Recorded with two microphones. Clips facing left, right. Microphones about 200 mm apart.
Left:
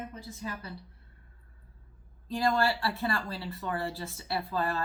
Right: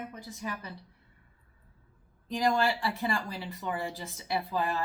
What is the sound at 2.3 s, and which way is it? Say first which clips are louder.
Speech: even; 15° right (ahead or behind).